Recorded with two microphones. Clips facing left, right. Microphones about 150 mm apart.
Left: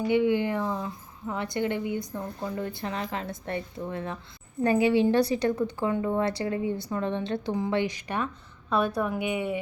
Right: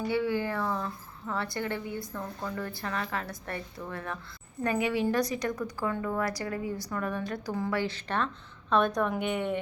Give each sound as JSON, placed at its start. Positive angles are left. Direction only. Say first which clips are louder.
{"t": 0.1, "sound": "a woman's voice", "louder": "left 6 dB", "side_deg": 20}